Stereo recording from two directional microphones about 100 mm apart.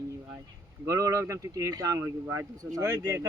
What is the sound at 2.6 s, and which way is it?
Speech, 35° right (ahead or behind).